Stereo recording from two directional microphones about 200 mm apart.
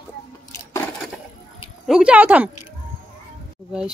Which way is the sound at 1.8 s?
5° right (ahead or behind).